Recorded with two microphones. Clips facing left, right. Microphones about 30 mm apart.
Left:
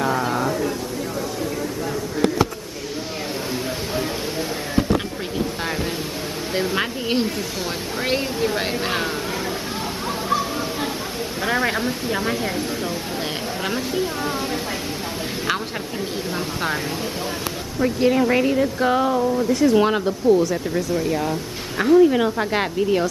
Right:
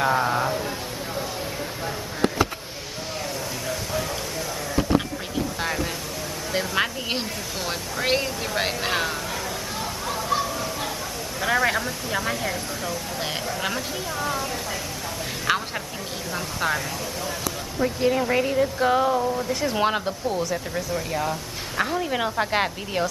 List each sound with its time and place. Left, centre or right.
0.0 s a sound: centre
6.5 s speech: centre
6.8 s speech: centre
8.8 s speech: centre
10.4 s a sound: left
11.4 s speech: centre
16.3 s speech: centre